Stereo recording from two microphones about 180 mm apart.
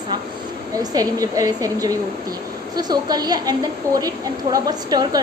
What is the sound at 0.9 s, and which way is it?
A woman's voice, 20° right (ahead or behind).